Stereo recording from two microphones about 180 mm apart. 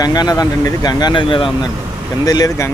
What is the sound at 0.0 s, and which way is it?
Speech, 20° left (ahead or behind).